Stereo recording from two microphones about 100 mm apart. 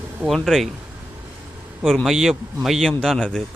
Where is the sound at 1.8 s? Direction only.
5° left (ahead or behind).